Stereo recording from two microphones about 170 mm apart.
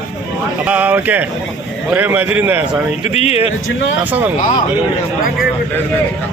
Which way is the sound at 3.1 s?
35° left (ahead or behind).